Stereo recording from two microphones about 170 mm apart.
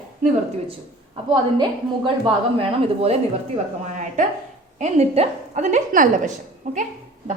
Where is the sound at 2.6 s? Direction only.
35° right (ahead or behind).